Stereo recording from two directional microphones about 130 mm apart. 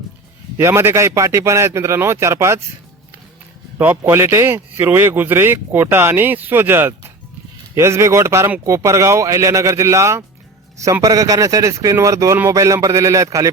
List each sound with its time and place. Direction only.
0.5 s speech: 20° right (ahead or behind)
3.8 s speech: 15° right (ahead or behind)